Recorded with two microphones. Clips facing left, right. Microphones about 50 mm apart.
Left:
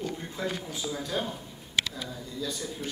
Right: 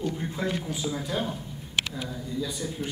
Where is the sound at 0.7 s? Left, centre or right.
Centre.